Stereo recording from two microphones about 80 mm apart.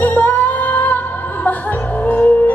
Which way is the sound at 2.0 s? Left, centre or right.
Left.